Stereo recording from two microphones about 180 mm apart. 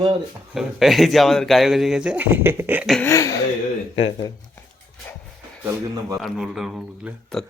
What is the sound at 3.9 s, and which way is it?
Speech, 30° left (ahead or behind).